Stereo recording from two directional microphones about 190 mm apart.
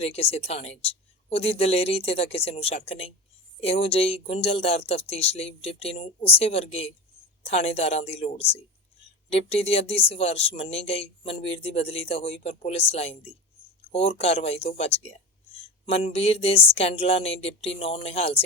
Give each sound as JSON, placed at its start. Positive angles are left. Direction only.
{"t": 0.0, "sound": "speech", "side_deg": 30}